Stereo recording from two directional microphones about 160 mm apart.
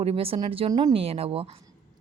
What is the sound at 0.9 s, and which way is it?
Speech, 40° right (ahead or behind).